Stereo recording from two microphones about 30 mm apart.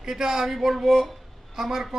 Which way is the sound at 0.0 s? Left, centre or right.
Centre.